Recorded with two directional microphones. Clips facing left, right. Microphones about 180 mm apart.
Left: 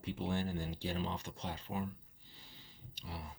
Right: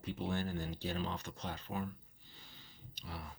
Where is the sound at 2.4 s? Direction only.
30° left (ahead or behind).